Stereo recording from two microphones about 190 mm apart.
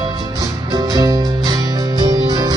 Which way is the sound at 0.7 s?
20° right (ahead or behind).